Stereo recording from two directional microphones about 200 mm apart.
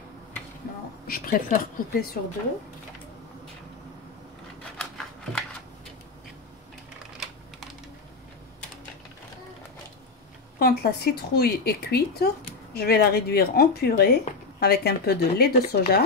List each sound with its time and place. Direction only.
1.0 s speech: 45° left (ahead or behind)
4.7 s scissors: 5° left (ahead or behind)
10.6 s speech: 50° left (ahead or behind)